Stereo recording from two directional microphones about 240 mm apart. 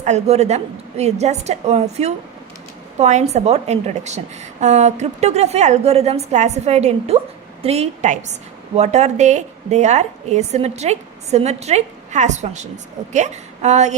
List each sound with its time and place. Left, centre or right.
0.0 s a woman's voice: right